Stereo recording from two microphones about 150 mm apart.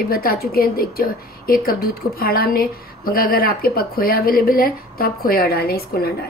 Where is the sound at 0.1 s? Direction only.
85° left.